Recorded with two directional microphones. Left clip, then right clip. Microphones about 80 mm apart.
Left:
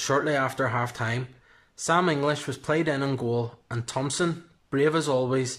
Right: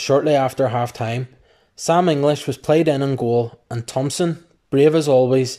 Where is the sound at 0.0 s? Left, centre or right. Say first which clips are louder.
Right 8 dB; right.